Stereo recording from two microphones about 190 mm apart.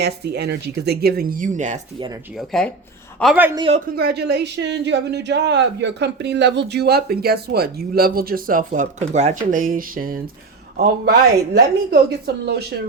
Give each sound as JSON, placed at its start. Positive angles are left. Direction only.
{"t": 0.0, "sound": "speech", "side_deg": -60}
{"t": 2.5, "sound": "speech", "side_deg": 5}
{"t": 3.3, "sound": "a man's voice", "side_deg": -10}
{"t": 3.9, "sound": "speech", "side_deg": -60}